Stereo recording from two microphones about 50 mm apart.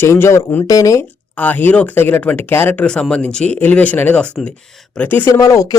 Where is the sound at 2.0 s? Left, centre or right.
Left.